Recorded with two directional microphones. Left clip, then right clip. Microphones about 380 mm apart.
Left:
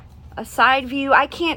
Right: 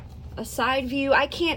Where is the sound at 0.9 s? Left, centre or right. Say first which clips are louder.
Left 5 dB; centre.